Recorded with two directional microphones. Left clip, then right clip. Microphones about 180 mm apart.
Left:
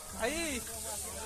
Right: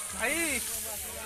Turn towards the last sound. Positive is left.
turn(degrees=-30)  # may be behind; listen again after turning